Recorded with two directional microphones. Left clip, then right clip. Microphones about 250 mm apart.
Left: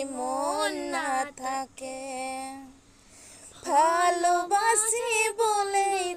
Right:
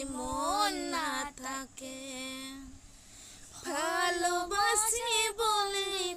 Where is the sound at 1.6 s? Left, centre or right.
Centre.